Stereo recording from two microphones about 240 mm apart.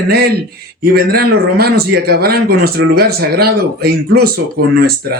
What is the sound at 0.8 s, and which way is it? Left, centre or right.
Speech, right.